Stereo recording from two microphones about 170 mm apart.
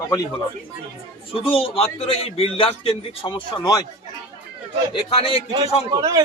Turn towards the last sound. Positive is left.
turn(degrees=-20)  # may be behind; listen again after turning